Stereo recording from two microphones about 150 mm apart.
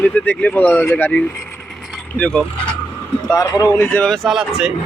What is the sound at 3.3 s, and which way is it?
Speech, 20° left (ahead or behind).